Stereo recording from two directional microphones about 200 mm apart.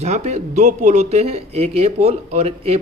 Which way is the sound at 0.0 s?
35° right (ahead or behind).